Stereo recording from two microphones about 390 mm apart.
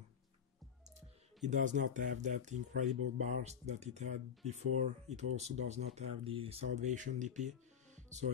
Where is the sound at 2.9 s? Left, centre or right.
Right.